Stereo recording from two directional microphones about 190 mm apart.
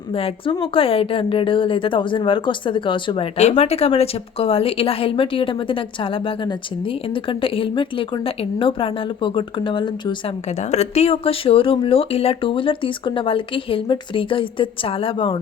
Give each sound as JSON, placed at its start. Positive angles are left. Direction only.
{"t": 0.1, "sound": "a woman's voice", "side_deg": 30}
{"t": 10.5, "sound": "a woman's voice", "side_deg": 35}